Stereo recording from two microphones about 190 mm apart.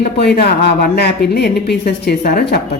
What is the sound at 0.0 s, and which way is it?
A woman's voice, 55° left (ahead or behind).